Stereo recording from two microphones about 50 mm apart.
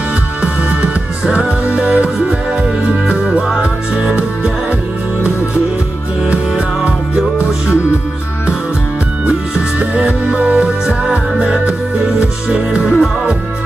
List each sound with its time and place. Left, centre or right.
1.8 s music: right
3.1 s music: centre
6.2 s music: right
9.8 s music: right